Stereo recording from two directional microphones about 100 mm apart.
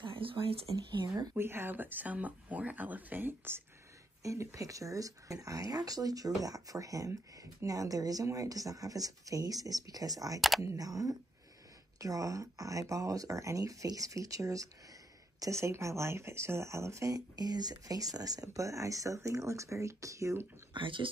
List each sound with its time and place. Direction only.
0.0 s a sound: 65° right (ahead or behind)
0.9 s speech: 45° right (ahead or behind)
1.3 s speech: 25° right (ahead or behind)
20.7 s speech: 55° right (ahead or behind)